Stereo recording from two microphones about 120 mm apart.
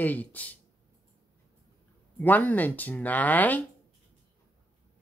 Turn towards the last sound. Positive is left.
turn(degrees=15)  # may be behind; listen again after turning